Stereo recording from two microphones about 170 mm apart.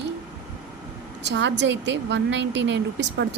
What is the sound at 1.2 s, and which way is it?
A woman's voice, 90° right.